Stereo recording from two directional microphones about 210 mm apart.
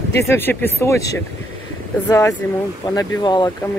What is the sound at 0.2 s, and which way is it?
Speech, 10° left (ahead or behind).